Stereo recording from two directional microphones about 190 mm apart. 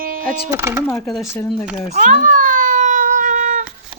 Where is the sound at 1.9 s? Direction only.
40° right (ahead or behind).